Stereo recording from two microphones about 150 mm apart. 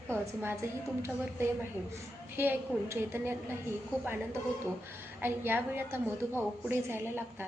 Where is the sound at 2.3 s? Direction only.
15° right (ahead or behind).